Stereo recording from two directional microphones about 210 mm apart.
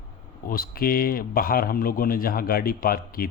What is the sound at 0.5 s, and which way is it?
Speech, 45° left (ahead or behind).